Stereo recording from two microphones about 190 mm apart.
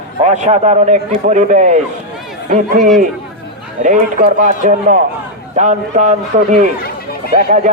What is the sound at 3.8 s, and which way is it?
A man's voice, 40° right (ahead or behind).